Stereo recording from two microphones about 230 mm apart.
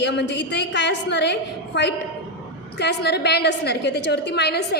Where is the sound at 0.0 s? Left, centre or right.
Left.